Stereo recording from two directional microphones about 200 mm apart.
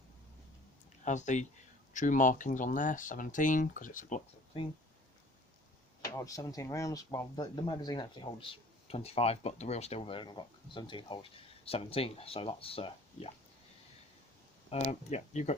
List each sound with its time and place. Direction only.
1.0 s speech: 35° left (ahead or behind)
4.5 s speech: 25° left (ahead or behind)
6.1 s speech: 15° left (ahead or behind)
14.7 s speech: 35° left (ahead or behind)